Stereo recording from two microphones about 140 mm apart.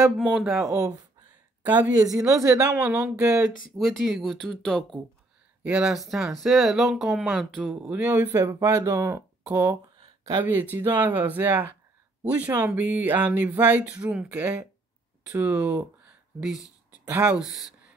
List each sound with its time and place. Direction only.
0.0 s speech: 10° right (ahead or behind)
2.0 s speech: 25° right (ahead or behind)
3.7 s speech: centre (ahead or behind)
5.6 s speech: 10° right (ahead or behind)
17.0 s speech: 15° right (ahead or behind)
17.4 s speech: 5° right (ahead or behind)